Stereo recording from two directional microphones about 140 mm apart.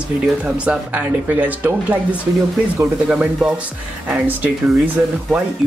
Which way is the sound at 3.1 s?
5° right (ahead or behind).